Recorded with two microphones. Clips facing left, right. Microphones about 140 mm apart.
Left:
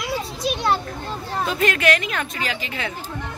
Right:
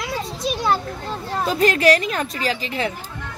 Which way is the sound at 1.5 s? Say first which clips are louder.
Right 4 dB; 35° right (ahead or behind).